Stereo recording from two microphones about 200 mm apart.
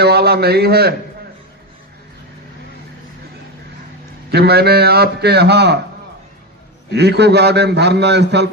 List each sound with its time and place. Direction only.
0.0 s a man's voice: 55° right (ahead or behind)
4.3 s a man's voice: 55° right (ahead or behind)
6.9 s a man's voice: 55° right (ahead or behind)